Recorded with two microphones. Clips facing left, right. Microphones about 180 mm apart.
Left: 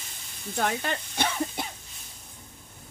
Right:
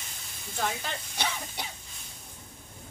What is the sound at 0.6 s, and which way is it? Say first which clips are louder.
Speech: left 4 dB; 60° left (ahead or behind).